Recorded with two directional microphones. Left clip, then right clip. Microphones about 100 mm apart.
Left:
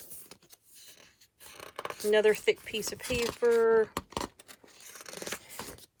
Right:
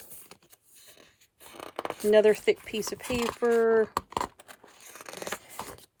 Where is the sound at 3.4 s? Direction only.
50° right (ahead or behind); by 4.7 s 65° right (ahead or behind).